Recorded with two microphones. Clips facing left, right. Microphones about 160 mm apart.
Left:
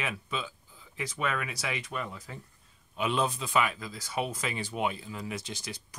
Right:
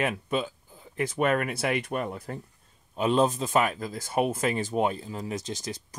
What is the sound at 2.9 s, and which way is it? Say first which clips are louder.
Speech: right 6 dB; 40° right (ahead or behind).